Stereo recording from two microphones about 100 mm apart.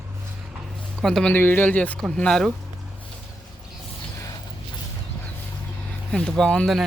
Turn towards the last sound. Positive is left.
turn(degrees=10)  # may be behind; listen again after turning